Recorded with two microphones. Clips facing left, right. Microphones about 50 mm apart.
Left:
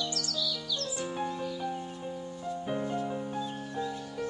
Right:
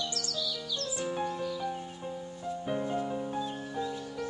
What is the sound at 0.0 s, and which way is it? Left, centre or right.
Music, right.